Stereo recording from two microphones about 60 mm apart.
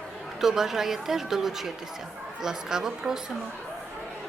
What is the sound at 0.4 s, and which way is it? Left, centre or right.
Speech, centre.